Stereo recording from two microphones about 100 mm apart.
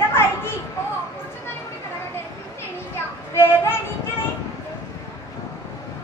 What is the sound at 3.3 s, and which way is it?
Child singing, 25° left (ahead or behind).